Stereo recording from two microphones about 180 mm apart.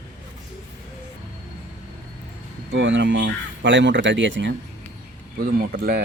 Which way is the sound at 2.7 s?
90° right.